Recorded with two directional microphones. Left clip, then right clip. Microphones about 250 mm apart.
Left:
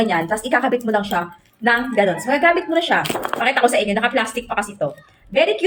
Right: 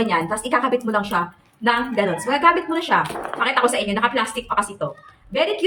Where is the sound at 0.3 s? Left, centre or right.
Centre.